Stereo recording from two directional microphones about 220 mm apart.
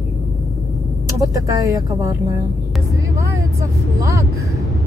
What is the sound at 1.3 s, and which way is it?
Speech, 15° right (ahead or behind).